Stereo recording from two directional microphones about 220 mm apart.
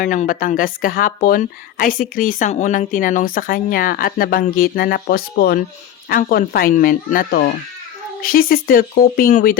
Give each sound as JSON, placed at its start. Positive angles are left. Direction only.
{"t": 0.0, "sound": "a woman's voice", "side_deg": 35}